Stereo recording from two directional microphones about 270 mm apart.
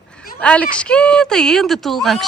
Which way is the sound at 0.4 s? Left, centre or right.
Centre.